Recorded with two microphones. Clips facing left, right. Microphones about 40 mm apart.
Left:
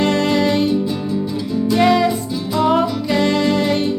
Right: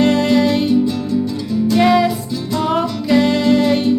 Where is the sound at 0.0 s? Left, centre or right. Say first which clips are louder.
Right 2 dB; centre.